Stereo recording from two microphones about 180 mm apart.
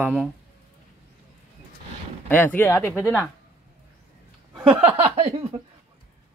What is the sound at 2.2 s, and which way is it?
Speech, 10° left (ahead or behind).